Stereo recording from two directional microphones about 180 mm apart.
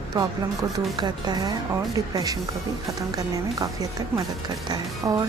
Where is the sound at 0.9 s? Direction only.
20° right (ahead or behind).